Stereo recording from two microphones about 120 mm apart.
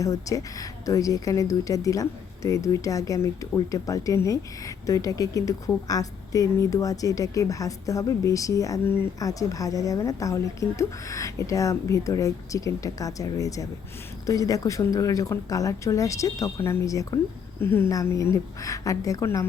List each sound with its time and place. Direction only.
0.0 s a woman's voice: 30° left (ahead or behind)
9.1 s a woman's voice: 30° left (ahead or behind)